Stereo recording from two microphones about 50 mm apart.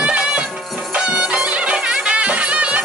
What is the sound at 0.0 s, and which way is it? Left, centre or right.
Music, right.